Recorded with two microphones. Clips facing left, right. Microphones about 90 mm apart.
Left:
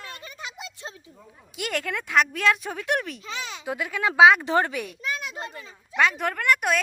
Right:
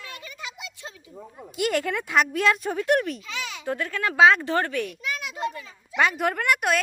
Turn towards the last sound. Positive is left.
turn(degrees=0)  # may be behind; listen again after turning